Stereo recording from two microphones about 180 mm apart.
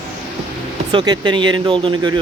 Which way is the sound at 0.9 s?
25° right (ahead or behind).